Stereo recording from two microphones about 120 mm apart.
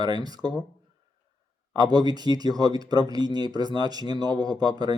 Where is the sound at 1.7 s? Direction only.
35° right (ahead or behind).